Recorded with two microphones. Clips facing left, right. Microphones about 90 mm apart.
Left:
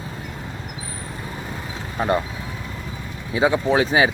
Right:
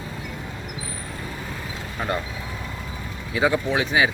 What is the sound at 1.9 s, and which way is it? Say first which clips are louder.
Speech: left 6 dB; 25° left (ahead or behind).